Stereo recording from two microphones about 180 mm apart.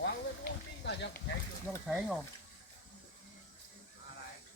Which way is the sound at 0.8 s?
75° left (ahead or behind).